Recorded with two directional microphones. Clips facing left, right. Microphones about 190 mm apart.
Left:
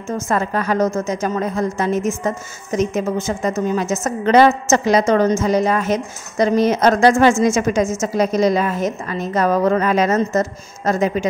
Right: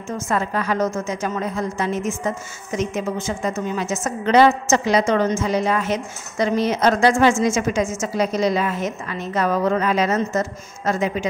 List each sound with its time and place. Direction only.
0.3 s a woman's voice: 45° left (ahead or behind)